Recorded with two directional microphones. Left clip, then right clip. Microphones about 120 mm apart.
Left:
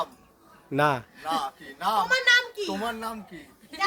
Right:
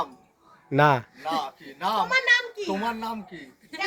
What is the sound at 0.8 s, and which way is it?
Speech, 15° right (ahead or behind).